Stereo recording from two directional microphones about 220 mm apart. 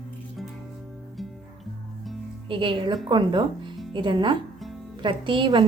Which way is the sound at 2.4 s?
20° right (ahead or behind).